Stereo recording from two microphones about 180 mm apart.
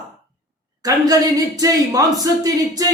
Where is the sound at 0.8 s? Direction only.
20° right (ahead or behind).